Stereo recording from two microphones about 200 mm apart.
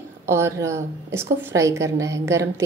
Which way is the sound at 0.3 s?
15° right (ahead or behind).